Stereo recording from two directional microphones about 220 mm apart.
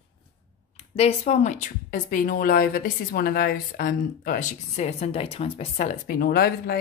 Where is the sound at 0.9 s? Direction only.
30° left (ahead or behind).